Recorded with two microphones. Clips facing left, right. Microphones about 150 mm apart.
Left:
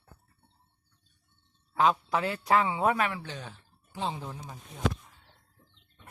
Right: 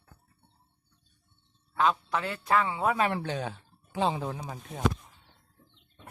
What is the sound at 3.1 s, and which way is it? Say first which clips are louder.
Speech: right 7 dB; 60° right (ahead or behind).